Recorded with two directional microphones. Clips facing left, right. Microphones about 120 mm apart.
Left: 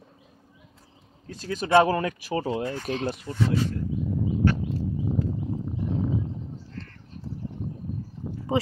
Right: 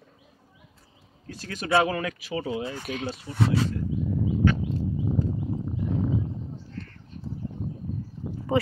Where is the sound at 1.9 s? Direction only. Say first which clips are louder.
Left 3 dB; 35° left (ahead or behind).